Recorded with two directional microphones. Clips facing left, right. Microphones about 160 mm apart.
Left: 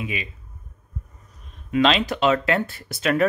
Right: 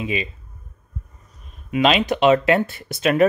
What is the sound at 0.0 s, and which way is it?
Speech, 25° right (ahead or behind).